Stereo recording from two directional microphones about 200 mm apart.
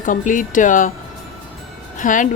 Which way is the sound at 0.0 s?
40° left (ahead or behind).